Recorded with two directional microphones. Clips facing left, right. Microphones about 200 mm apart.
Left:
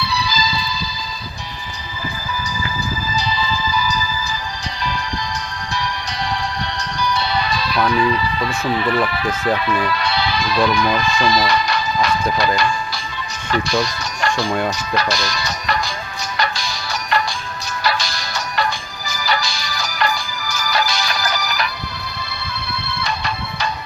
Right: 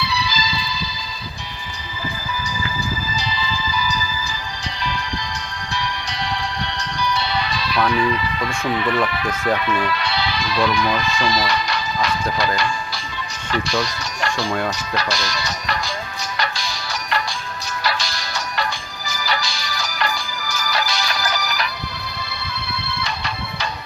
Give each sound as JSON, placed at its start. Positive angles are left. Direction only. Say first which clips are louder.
{"t": 0.0, "sound": "music", "louder": "left 2 dB", "side_deg": 40}
{"t": 3.2, "sound": "music", "louder": "left 4 dB", "side_deg": 45}
{"t": 5.7, "sound": "music", "louder": "left 1 dB", "side_deg": 40}
{"t": 13.5, "sound": "speech", "louder": "left 3 dB", "side_deg": 50}
{"t": 14.9, "sound": "music", "louder": "left 3 dB", "side_deg": 50}
{"t": 23.0, "sound": "music", "louder": "left 5 dB", "side_deg": 50}